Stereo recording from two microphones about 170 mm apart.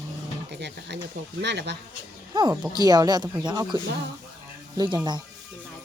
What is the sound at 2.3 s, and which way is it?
Speech, 25° right (ahead or behind).